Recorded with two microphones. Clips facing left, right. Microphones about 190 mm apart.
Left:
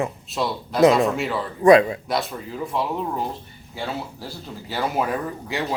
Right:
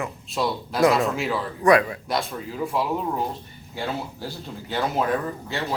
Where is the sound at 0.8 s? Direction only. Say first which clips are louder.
Left 4 dB; 20° left (ahead or behind).